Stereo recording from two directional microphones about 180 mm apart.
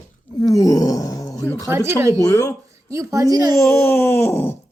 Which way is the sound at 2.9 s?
15° right (ahead or behind).